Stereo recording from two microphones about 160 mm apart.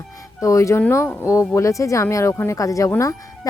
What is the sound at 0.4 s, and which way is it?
Speech, 20° left (ahead or behind).